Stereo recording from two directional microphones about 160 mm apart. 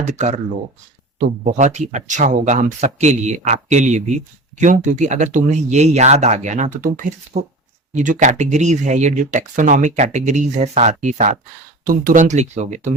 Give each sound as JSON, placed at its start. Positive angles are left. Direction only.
{"t": 0.1, "sound": "speech", "side_deg": -45}
{"t": 1.5, "sound": "speech", "side_deg": -45}
{"t": 7.3, "sound": "speech", "side_deg": -40}
{"t": 7.9, "sound": "speech", "side_deg": -50}